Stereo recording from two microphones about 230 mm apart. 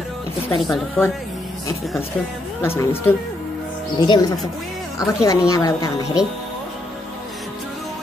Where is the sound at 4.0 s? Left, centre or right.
Centre.